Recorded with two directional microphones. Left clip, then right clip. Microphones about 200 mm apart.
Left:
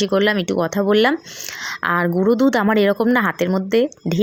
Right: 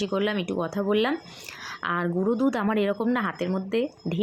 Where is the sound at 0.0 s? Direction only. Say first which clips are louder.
Left 9 dB; 40° left (ahead or behind).